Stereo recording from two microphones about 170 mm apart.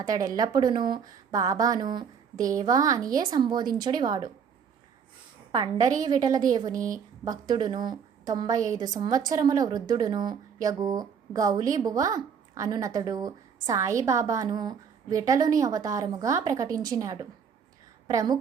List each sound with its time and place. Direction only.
0.0 s a woman's voice: 20° right (ahead or behind)
5.5 s a woman's voice: 25° right (ahead or behind)
6.7 s speech: 50° right (ahead or behind)
7.3 s a woman's voice: 25° right (ahead or behind)